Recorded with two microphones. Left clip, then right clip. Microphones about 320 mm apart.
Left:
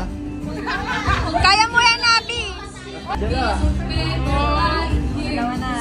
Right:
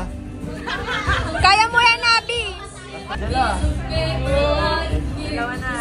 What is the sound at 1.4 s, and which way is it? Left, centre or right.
Speech, centre.